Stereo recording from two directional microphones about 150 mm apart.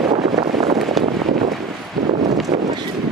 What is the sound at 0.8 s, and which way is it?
Vehicle, centre (ahead or behind).